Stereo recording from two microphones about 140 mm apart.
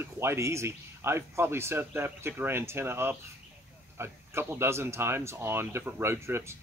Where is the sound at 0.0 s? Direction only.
20° right (ahead or behind).